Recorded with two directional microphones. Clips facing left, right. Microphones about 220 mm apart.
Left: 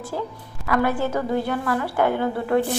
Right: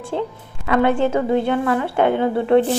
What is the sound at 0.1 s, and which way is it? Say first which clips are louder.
A woman's voice: right 7 dB; 25° right (ahead or behind).